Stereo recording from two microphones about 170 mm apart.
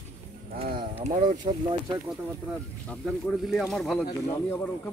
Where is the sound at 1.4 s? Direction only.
35° right (ahead or behind).